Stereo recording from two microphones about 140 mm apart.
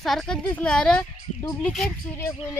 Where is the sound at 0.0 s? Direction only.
Centre (ahead or behind).